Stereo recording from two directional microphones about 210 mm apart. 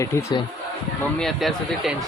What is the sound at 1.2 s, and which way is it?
Speech, centre (ahead or behind).